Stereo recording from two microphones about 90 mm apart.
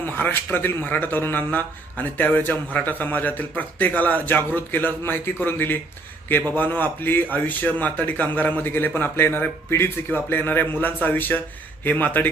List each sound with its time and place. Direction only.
0.0 s speech: 20° left (ahead or behind)